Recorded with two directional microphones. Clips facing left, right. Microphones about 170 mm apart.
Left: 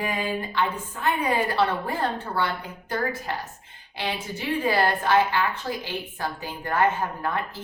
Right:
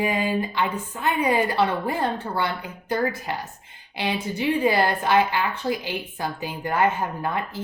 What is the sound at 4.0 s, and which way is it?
Speech, 15° right (ahead or behind).